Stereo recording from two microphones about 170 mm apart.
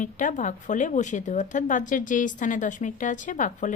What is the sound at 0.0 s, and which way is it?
Speech, 50° left (ahead or behind).